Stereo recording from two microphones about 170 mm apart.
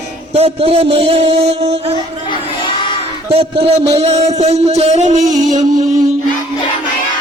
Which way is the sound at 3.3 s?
35° right (ahead or behind).